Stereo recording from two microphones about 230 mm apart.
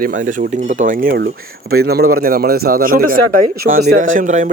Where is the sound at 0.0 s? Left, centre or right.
Right.